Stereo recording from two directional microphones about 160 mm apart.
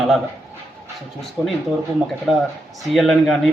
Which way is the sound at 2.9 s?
Centre (ahead or behind).